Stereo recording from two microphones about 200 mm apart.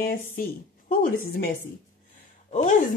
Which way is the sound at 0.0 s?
50° left (ahead or behind).